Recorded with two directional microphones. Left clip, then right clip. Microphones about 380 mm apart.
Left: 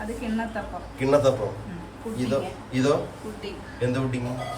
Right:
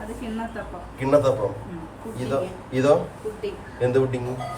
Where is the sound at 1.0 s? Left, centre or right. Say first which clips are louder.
Right 1 dB; centre.